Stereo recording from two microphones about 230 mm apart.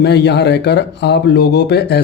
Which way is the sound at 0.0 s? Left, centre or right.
Left.